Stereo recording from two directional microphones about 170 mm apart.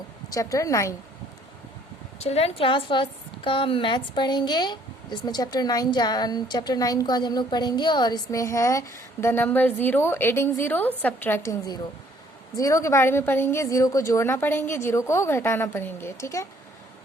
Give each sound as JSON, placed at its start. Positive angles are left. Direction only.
{"t": 0.3, "sound": "a woman's voice", "side_deg": 20}
{"t": 2.1, "sound": "a woman's voice", "side_deg": 40}